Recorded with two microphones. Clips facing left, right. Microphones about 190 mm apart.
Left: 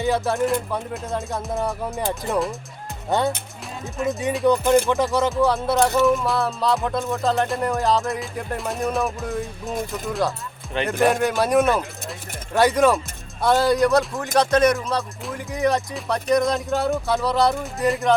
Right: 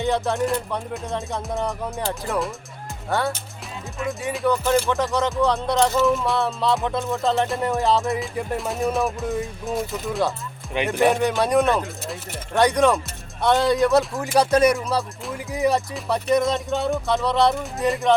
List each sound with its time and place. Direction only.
0.0 s music: centre (ahead or behind)
2.0 s speech: 15° left (ahead or behind)
4.4 s speech: 15° left (ahead or behind)
5.3 s music: centre (ahead or behind)
6.1 s music: centre (ahead or behind)